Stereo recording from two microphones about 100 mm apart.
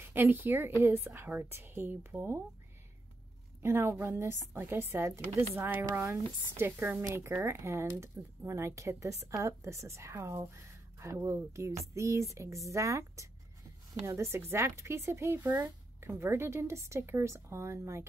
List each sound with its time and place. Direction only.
0.0 s speech: 20° right (ahead or behind)
3.6 s speech: 25° right (ahead or behind)